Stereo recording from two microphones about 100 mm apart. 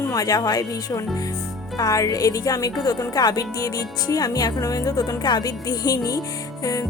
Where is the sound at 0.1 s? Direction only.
35° left (ahead or behind).